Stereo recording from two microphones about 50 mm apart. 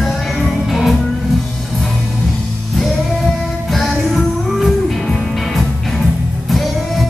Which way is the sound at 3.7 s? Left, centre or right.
Centre.